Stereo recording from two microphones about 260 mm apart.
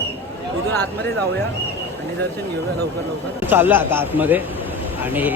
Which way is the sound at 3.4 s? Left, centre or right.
Centre.